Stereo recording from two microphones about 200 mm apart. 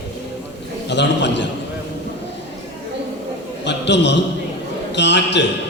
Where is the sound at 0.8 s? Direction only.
60° left (ahead or behind).